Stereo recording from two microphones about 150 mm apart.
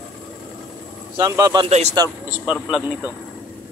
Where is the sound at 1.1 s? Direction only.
25° right (ahead or behind).